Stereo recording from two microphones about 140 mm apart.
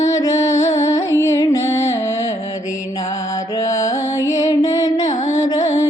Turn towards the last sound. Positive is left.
turn(degrees=55)  # may be behind; listen again after turning